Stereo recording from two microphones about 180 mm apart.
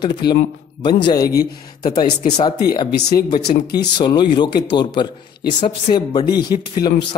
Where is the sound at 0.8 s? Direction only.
25° left (ahead or behind).